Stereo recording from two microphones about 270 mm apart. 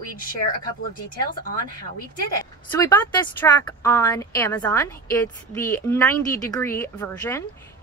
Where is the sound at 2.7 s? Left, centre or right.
Centre.